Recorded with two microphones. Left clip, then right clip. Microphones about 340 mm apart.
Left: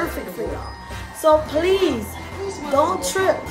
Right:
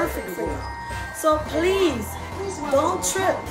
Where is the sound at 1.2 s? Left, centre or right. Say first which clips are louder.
Left 5 dB; centre.